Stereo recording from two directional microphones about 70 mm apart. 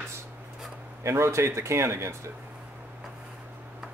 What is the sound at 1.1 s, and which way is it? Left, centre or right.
Speech, right.